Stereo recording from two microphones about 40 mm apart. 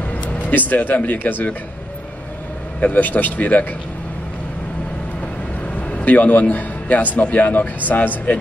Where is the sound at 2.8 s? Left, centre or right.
Left.